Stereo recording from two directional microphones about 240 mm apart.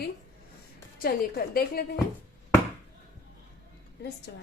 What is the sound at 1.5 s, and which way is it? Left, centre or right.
Speech, left.